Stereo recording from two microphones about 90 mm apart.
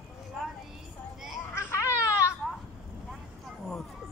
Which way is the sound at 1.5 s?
30° left (ahead or behind).